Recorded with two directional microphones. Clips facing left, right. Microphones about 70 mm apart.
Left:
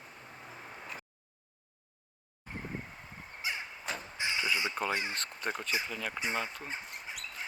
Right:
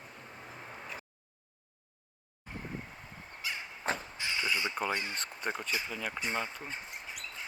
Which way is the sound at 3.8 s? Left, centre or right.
Right.